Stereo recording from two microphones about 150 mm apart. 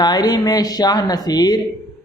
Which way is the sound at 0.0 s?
25° left (ahead or behind).